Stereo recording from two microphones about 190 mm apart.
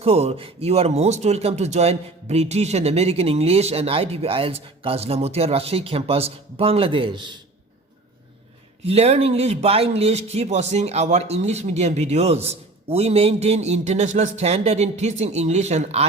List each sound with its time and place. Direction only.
0.0 s speech: 30° right (ahead or behind)
8.9 s speech: 35° right (ahead or behind)